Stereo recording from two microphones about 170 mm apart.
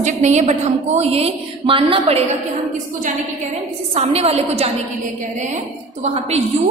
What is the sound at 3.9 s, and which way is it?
Speech, 35° right (ahead or behind).